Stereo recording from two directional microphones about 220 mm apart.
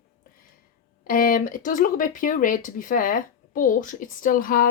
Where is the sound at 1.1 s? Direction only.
40° left (ahead or behind).